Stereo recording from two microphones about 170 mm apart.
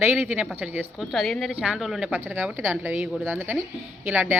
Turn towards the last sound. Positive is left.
turn(degrees=-10)  # may be behind; listen again after turning